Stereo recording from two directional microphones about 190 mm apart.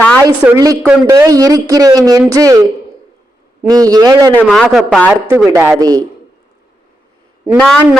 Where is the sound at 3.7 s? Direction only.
20° right (ahead or behind).